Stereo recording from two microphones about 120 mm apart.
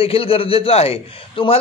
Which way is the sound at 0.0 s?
50° left (ahead or behind).